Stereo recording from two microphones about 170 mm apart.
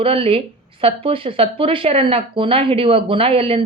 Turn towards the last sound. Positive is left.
turn(degrees=-35)  # may be behind; listen again after turning